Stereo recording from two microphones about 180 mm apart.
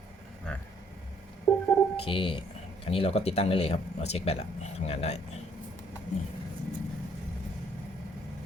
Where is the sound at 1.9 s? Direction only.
30° left (ahead or behind).